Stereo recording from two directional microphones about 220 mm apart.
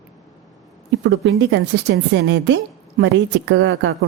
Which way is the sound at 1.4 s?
55° right (ahead or behind).